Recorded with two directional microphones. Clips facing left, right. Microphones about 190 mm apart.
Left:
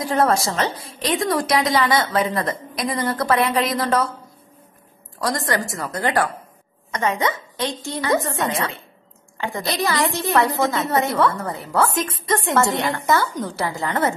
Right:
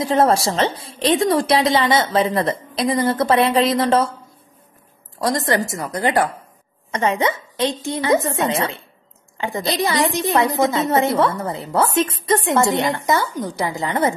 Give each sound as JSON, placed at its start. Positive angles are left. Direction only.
{"t": 0.0, "sound": "a woman's voice", "side_deg": -25}
{"t": 5.2, "sound": "a woman's voice", "side_deg": -25}